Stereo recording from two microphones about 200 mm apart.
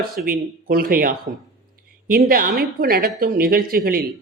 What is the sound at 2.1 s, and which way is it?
Speech, 50° right (ahead or behind).